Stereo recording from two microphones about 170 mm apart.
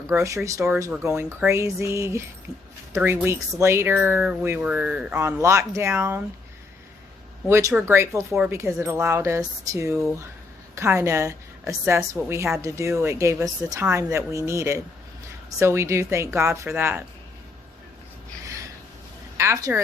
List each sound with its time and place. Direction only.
0.1 s speech: 15° right (ahead or behind)
2.5 s speech: 35° left (ahead or behind)
2.9 s speech: 10° right (ahead or behind)
7.4 s speech: 15° right (ahead or behind)
19.4 s speech: 15° right (ahead or behind)